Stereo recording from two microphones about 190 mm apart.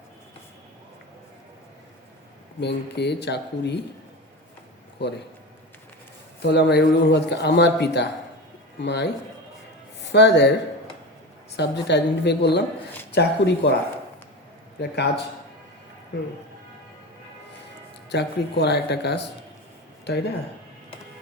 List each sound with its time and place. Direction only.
2.6 s a man's voice: 60° left (ahead or behind)
5.0 s a man's voice: 65° left (ahead or behind)
6.4 s a man's voice: 60° left (ahead or behind)
10.1 s a man's voice: 60° left (ahead or behind)
11.5 s a man's voice: 65° left (ahead or behind)
14.8 s a man's voice: 60° left (ahead or behind)
18.1 s a man's voice: 60° left (ahead or behind)